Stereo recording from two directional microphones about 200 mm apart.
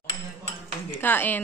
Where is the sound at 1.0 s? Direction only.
10° left (ahead or behind).